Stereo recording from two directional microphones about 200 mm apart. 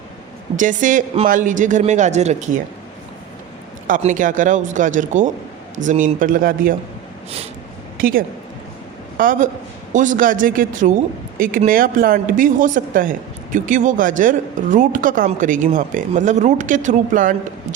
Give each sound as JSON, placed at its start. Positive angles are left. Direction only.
{"t": 0.5, "sound": "speech", "side_deg": -40}
{"t": 3.8, "sound": "speech", "side_deg": -40}
{"t": 7.9, "sound": "a woman's voice", "side_deg": -45}